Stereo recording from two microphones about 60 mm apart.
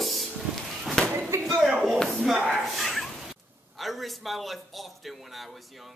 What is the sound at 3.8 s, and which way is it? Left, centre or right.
Speech, centre.